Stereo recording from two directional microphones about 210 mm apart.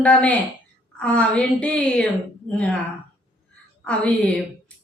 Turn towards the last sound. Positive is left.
turn(degrees=5)  # may be behind; listen again after turning